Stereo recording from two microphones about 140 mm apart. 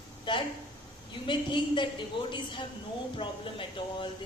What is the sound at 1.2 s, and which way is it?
A woman's voice, 35° left (ahead or behind).